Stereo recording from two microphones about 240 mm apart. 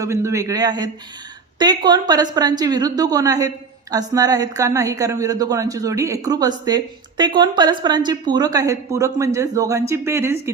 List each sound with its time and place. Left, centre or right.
0.0 s a woman's voice: centre